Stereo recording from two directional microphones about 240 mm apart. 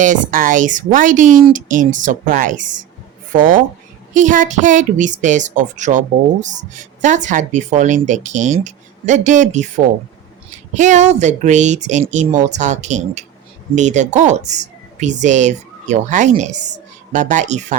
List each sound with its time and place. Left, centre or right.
0.0 s speech: right